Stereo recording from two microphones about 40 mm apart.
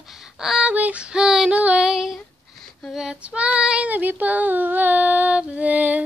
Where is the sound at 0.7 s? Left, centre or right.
Right.